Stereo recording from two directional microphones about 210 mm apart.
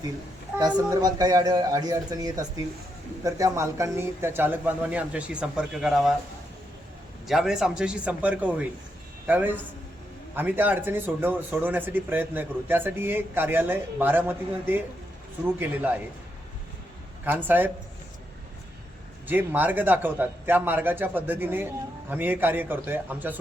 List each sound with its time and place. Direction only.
0.6 s speech: 20° right (ahead or behind); by 6.1 s centre (ahead or behind)
7.3 s a man's voice: centre (ahead or behind)
17.2 s speech: 10° right (ahead or behind)
19.3 s speech: 10° right (ahead or behind)